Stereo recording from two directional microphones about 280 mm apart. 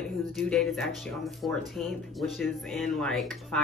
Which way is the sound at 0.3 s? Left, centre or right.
Centre.